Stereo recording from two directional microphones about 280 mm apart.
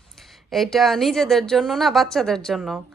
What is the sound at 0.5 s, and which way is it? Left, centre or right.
A woman's voice, centre.